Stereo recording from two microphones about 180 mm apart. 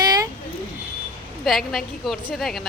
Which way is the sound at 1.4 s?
Centre (ahead or behind).